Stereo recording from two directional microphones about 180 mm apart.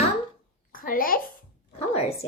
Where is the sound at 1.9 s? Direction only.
35° left (ahead or behind).